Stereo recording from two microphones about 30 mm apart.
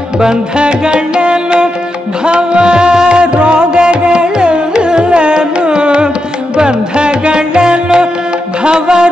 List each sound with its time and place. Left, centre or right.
0.2 s music: right